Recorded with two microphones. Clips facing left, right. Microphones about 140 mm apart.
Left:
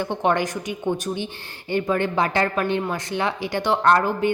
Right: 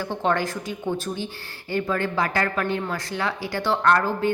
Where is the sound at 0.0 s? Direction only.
20° left (ahead or behind).